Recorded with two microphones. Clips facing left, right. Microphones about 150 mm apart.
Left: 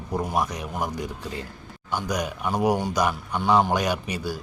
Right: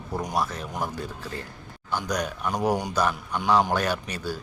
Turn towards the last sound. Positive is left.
turn(degrees=10)  # may be behind; listen again after turning